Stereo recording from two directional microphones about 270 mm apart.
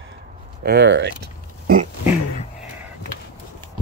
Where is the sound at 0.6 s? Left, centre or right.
Right.